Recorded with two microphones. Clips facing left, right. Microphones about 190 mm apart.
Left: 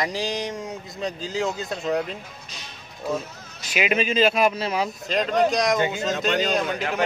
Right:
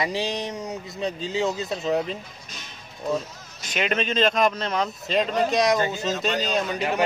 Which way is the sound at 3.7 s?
5° left (ahead or behind).